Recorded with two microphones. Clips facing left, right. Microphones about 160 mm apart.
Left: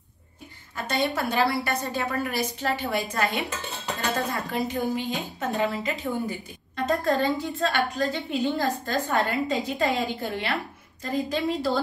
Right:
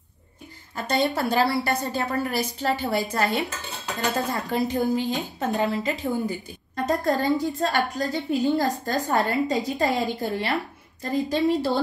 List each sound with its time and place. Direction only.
0.8 s a woman's voice: 35° right (ahead or behind)